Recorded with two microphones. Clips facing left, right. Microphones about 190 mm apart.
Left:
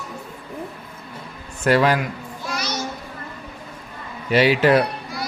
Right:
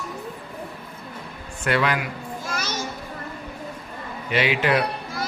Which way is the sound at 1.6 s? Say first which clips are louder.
Left 6 dB; 35° left (ahead or behind).